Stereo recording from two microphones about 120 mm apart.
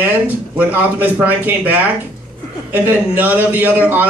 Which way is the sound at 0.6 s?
15° right (ahead or behind).